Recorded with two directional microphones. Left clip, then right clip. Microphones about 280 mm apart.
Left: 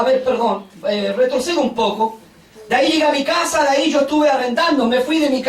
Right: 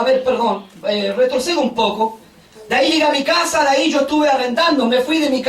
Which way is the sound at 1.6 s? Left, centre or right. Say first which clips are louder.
Right 1 dB; right.